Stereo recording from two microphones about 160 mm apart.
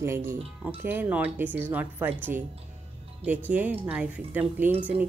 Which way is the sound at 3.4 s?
10° right (ahead or behind).